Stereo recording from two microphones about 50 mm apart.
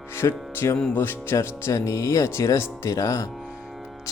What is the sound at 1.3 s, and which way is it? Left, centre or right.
Speech, left.